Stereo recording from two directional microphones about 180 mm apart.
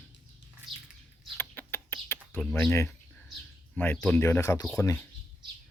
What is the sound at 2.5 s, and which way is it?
Speech, 15° left (ahead or behind).